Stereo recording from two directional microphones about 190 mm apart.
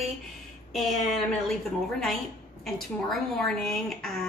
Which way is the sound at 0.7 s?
Centre (ahead or behind).